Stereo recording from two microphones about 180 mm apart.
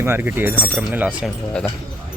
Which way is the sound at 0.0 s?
10° right (ahead or behind).